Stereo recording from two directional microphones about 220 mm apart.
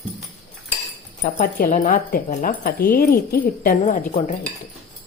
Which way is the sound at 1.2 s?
40° left (ahead or behind).